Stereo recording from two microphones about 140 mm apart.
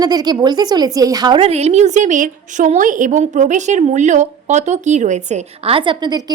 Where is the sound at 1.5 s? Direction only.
50° right (ahead or behind).